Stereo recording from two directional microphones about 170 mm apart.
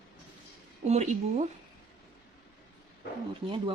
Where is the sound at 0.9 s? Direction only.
45° right (ahead or behind).